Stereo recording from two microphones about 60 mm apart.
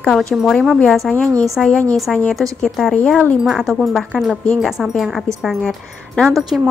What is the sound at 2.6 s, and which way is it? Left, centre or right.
A woman's voice, centre.